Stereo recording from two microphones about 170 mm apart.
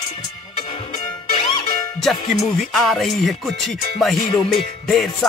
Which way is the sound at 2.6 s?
Centre (ahead or behind).